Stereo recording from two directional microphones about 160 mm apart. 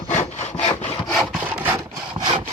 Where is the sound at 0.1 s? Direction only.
45° left (ahead or behind).